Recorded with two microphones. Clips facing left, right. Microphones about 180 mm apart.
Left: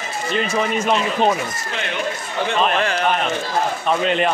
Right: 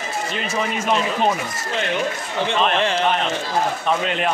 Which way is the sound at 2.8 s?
25° right (ahead or behind).